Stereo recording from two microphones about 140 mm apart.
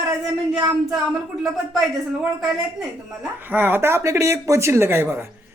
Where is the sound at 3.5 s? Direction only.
15° right (ahead or behind).